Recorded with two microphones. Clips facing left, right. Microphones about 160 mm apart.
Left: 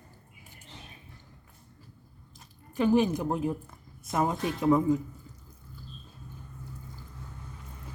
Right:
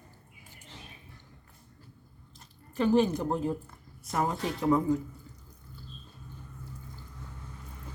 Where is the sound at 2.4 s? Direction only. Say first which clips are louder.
Left 1 dB; 10° left (ahead or behind).